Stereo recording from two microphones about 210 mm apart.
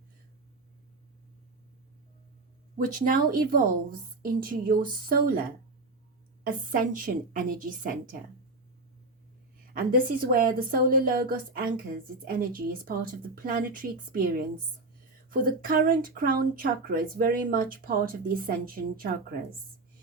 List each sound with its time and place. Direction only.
2.7 s a woman's voice: 40° right (ahead or behind)
9.7 s a woman's voice: 40° right (ahead or behind)